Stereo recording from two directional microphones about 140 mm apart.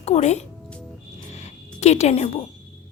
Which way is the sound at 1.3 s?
55° left (ahead or behind).